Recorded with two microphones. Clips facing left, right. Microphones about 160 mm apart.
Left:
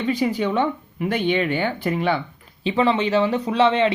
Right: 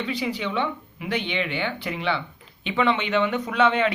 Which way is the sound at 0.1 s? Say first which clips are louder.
Left 6 dB; 45° left (ahead or behind).